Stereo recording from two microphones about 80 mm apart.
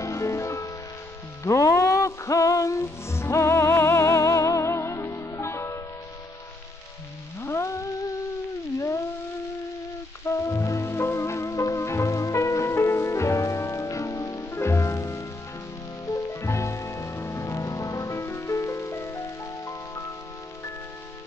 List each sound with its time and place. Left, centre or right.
0.0 s music: left
7.3 s music: left
8.7 s theremin: left
10.2 s music: left